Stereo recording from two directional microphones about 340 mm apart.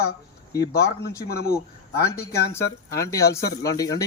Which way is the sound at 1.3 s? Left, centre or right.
Left.